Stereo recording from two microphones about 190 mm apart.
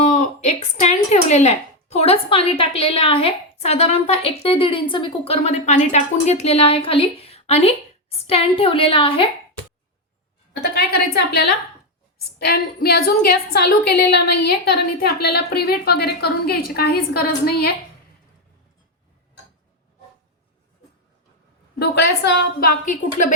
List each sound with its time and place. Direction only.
0.0 s speech: 40° left (ahead or behind)
10.8 s a woman's voice: 55° left (ahead or behind)
21.8 s a woman's voice: 60° left (ahead or behind); by 23.3 s 45° left (ahead or behind)